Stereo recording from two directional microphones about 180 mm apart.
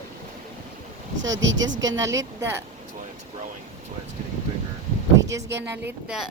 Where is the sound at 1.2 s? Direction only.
90° right.